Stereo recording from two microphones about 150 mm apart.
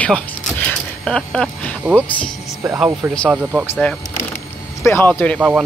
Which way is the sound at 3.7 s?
10° left (ahead or behind).